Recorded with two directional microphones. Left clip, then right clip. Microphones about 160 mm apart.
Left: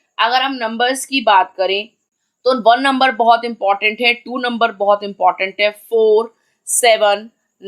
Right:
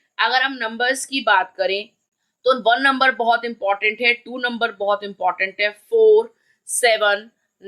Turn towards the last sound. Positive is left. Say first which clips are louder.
# left 4 dB
turn(degrees=25)  # may be behind; listen again after turning